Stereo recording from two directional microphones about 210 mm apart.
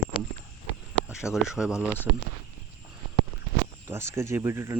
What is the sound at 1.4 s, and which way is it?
Speech, 5° right (ahead or behind).